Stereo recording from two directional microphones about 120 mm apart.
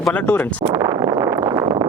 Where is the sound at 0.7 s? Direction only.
30° right (ahead or behind).